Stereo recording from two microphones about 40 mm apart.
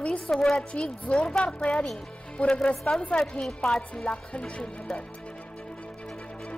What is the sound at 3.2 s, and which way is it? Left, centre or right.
Speech, centre.